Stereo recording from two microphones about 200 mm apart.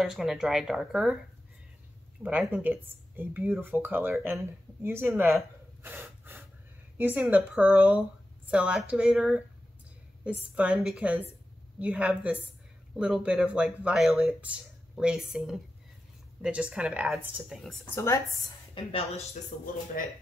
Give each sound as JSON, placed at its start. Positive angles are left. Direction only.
{"t": 0.0, "sound": "speech", "side_deg": 0}
{"t": 2.2, "sound": "speech", "side_deg": -5}
{"t": 17.8, "sound": "speech", "side_deg": 15}
{"t": 18.8, "sound": "a woman's voice", "side_deg": 30}
{"t": 19.5, "sound": "speech", "side_deg": 40}